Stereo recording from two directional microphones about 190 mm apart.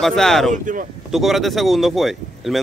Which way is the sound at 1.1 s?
Centre (ahead or behind).